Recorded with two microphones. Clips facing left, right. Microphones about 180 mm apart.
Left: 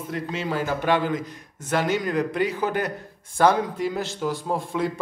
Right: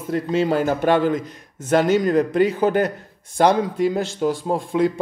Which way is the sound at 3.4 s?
20° right (ahead or behind).